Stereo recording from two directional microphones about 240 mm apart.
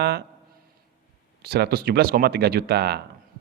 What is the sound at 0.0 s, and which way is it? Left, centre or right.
Speech, right.